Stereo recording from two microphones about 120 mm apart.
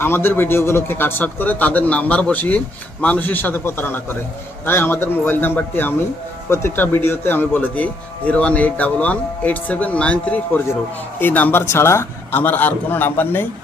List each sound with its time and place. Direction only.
0.0 s speech: 20° left (ahead or behind)